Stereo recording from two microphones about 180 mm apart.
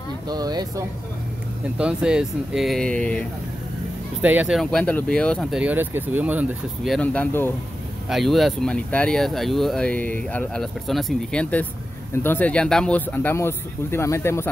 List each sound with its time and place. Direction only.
0.3 s speech: 20° right (ahead or behind)
1.8 s speech: 5° right (ahead or behind)
4.2 s speech: 10° right (ahead or behind)
5.6 s speech: 10° right (ahead or behind)
7.0 s speech: 10° left (ahead or behind)
8.1 s speech: centre (ahead or behind)